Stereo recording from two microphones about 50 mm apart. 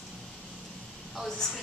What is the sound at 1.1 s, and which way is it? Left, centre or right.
Speech, centre.